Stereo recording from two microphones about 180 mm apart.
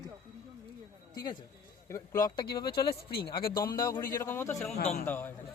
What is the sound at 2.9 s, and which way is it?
Speech, 60° left (ahead or behind).